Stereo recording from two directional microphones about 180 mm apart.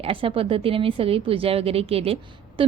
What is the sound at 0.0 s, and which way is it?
A woman's voice, 30° right (ahead or behind).